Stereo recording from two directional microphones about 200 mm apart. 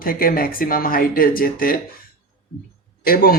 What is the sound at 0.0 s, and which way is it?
Speech, 45° left (ahead or behind).